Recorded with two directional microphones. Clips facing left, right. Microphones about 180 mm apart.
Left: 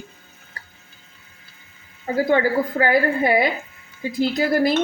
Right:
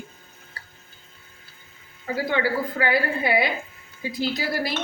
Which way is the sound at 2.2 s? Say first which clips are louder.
Left 5 dB; 45° left (ahead or behind).